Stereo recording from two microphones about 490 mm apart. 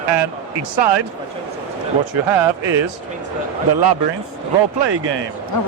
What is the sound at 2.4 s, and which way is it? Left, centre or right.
Speech, right.